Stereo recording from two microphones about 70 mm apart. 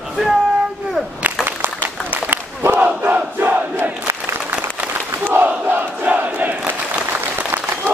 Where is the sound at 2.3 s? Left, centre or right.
Right.